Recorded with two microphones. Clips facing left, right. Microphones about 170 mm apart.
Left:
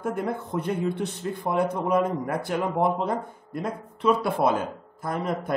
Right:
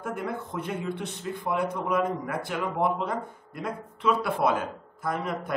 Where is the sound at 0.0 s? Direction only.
40° left (ahead or behind).